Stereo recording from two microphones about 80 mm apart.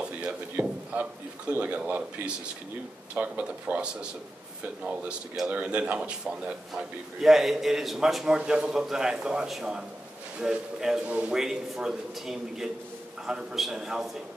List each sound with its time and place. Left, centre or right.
0.0 s a man's voice: centre
5.5 s a man's voice: centre